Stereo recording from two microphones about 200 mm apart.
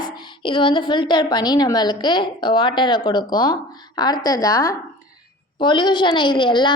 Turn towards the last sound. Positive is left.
turn(degrees=25)  # may be behind; listen again after turning